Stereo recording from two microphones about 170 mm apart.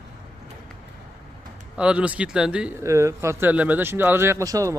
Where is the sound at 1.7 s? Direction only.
5° right (ahead or behind).